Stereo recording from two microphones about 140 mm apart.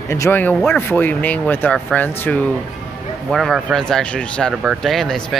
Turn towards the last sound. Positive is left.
turn(degrees=5)  # may be behind; listen again after turning